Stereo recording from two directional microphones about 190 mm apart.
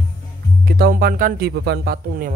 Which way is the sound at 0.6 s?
55° right (ahead or behind).